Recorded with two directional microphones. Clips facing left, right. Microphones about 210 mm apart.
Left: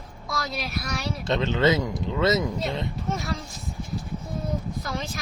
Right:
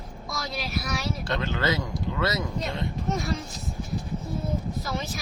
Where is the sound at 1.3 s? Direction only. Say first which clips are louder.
Left 7 dB; 20° left (ahead or behind).